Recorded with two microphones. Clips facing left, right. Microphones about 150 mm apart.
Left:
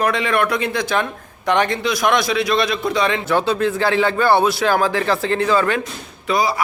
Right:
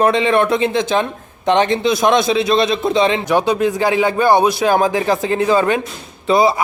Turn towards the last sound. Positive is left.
turn(degrees=-25)  # may be behind; listen again after turning